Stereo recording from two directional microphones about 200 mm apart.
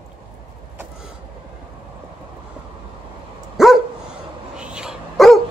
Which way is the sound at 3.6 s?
Centre (ahead or behind).